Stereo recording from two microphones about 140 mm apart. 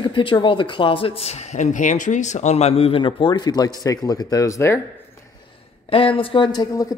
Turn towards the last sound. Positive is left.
turn(degrees=30)  # may be behind; listen again after turning